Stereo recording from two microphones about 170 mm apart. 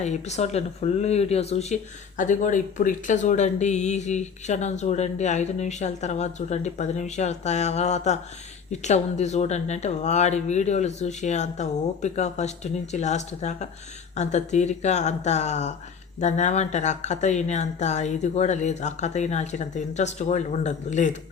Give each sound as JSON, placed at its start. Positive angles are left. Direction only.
{"t": 0.0, "sound": "speech", "side_deg": 40}